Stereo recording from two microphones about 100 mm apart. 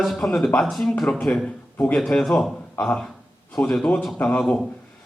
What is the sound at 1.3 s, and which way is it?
A man's voice, 15° left (ahead or behind).